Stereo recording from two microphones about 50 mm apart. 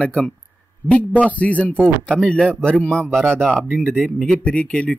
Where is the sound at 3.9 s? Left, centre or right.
Centre.